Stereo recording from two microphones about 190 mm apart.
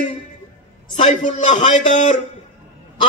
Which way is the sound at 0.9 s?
40° left (ahead or behind).